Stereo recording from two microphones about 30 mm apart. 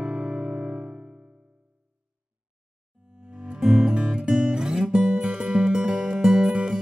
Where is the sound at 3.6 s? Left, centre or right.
Centre.